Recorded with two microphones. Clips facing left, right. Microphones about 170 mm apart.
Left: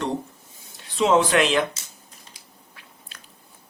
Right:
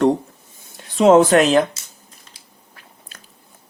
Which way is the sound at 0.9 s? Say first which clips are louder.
Right 7 dB; 45° right (ahead or behind).